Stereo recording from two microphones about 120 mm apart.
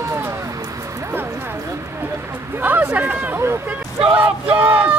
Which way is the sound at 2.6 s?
15° right (ahead or behind).